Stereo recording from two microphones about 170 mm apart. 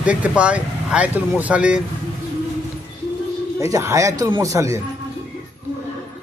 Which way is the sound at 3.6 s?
20° right (ahead or behind).